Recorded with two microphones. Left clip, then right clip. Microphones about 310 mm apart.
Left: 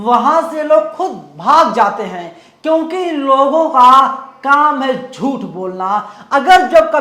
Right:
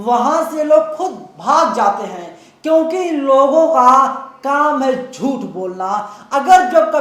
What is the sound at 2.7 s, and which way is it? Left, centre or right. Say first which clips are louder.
A woman's voice: right 1 dB; left.